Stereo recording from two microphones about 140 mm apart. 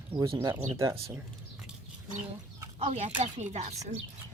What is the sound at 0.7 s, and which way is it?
Speech, 20° right (ahead or behind).